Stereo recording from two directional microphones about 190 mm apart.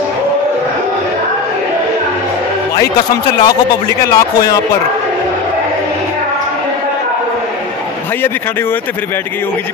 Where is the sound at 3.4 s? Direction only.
20° left (ahead or behind).